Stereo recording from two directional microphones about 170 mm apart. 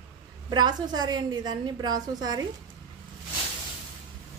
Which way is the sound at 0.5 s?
25° right (ahead or behind).